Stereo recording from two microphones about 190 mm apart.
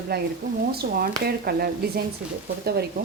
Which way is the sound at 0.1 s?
55° right (ahead or behind).